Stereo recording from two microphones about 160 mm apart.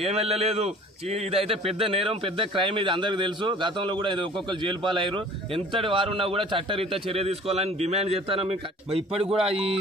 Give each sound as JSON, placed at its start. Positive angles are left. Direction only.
{"t": 0.0, "sound": "a man's voice", "side_deg": -40}